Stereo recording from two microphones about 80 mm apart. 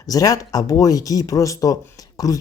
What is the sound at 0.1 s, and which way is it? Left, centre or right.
Speech, left.